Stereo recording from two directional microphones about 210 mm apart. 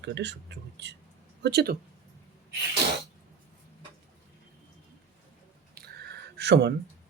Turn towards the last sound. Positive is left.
turn(degrees=-55)  # may be behind; listen again after turning